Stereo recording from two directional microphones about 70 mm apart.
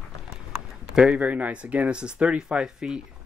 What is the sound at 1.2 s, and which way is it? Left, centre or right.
Speech, right.